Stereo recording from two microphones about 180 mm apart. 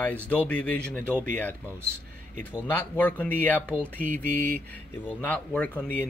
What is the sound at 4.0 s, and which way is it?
Mantra, 50° right (ahead or behind).